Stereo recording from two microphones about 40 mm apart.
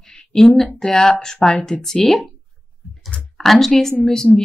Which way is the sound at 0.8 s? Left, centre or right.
Centre.